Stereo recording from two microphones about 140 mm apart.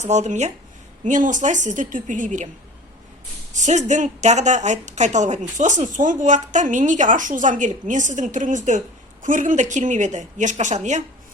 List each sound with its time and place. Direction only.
0.0 s speech: 55° right (ahead or behind)
3.5 s speech: 60° right (ahead or behind)